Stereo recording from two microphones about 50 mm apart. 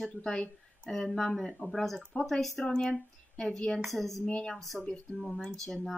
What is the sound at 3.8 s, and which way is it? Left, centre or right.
Speech, centre.